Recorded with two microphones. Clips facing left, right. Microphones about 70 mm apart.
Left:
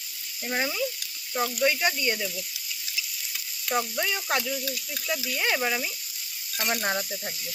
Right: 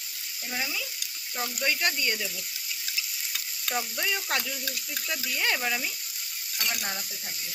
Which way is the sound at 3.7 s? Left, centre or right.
Centre.